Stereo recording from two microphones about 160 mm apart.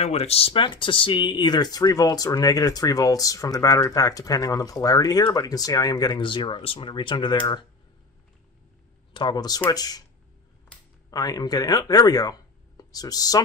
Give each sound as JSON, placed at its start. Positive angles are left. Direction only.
{"t": 0.0, "sound": "speech", "side_deg": 40}
{"t": 9.1, "sound": "speech", "side_deg": 30}
{"t": 11.1, "sound": "speech", "side_deg": 25}